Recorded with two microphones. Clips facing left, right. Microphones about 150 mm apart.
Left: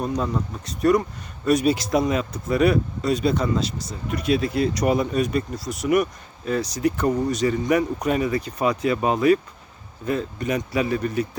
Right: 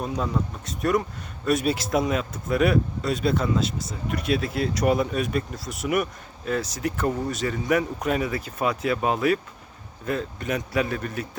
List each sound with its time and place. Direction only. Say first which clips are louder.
0.0 s speech: left 2 dB; centre (ahead or behind)